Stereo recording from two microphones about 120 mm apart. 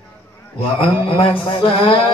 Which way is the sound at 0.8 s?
50° left (ahead or behind).